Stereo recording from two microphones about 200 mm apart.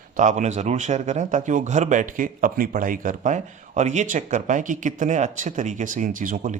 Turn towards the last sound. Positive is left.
turn(degrees=-40)  # may be behind; listen again after turning